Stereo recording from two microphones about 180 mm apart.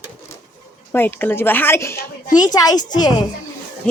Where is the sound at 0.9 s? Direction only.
10° left (ahead or behind).